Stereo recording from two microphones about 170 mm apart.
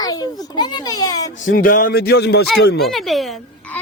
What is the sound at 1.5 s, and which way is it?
Speech, 55° left (ahead or behind).